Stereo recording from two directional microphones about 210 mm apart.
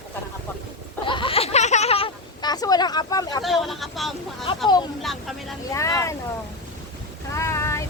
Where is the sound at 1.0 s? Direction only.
25° left (ahead or behind).